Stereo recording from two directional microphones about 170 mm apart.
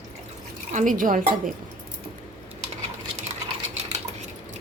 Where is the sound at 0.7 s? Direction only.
50° right (ahead or behind).